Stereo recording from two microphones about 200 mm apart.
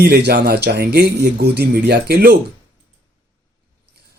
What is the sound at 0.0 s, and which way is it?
Speech, 55° right (ahead or behind).